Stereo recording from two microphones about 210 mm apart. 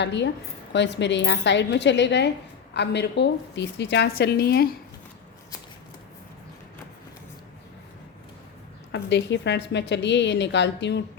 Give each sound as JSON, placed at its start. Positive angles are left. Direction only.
{"t": 0.0, "sound": "a woman's voice", "side_deg": 55}
{"t": 8.9, "sound": "a woman's voice", "side_deg": 55}